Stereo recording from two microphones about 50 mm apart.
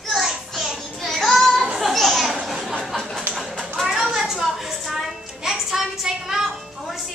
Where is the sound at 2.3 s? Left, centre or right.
Centre.